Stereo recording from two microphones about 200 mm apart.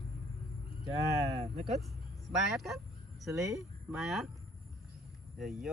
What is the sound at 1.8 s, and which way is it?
Speech, centre (ahead or behind).